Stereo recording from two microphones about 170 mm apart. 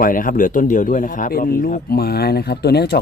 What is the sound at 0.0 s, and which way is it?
Speech, 55° left (ahead or behind).